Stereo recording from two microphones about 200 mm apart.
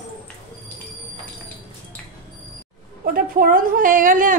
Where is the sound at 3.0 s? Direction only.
45° right (ahead or behind).